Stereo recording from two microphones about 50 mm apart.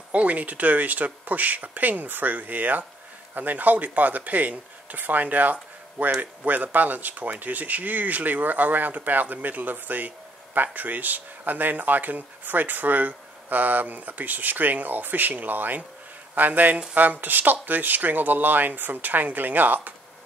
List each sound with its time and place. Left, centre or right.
0.1 s speech: right